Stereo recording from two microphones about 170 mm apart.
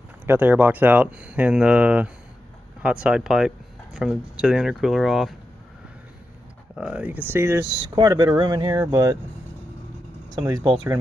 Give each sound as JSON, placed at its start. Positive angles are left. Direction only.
{"t": 0.3, "sound": "speech", "side_deg": -10}
{"t": 6.7, "sound": "speech", "side_deg": -5}
{"t": 10.3, "sound": "speech", "side_deg": -20}